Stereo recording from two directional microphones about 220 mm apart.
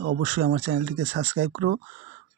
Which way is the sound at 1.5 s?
60° right (ahead or behind).